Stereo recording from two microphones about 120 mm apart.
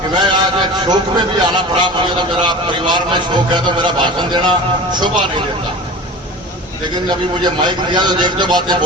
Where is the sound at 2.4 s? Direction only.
40° right (ahead or behind).